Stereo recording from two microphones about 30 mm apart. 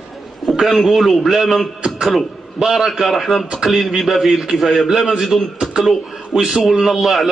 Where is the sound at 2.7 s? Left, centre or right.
Centre.